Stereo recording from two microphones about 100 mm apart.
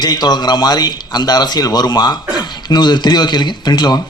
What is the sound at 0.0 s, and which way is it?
Speech, 45° left (ahead or behind).